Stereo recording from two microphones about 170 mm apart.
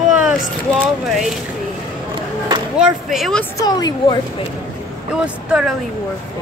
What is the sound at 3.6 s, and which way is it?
Speech, 25° left (ahead or behind).